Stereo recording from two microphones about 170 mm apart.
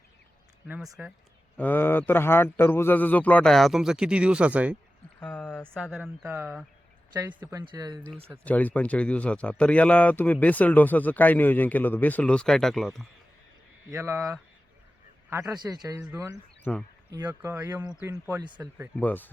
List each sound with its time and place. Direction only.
1.0 s speech: 10° right (ahead or behind)
1.5 s a man's voice: 10° left (ahead or behind); by 4.8 s 10° right (ahead or behind)
5.2 s a sound: 10° left (ahead or behind)
5.7 s speech: centre (ahead or behind)
7.1 s speech: 25° right (ahead or behind)
8.4 s a man's voice: 10° left (ahead or behind)
13.9 s speech: 15° right (ahead or behind)
16.7 s a man's voice: 10° left (ahead or behind)
17.1 s speech: 20° right (ahead or behind)
18.9 s a man's voice: 10° left (ahead or behind)